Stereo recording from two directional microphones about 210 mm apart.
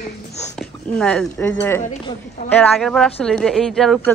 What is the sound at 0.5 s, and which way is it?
Speech, 5° left (ahead or behind).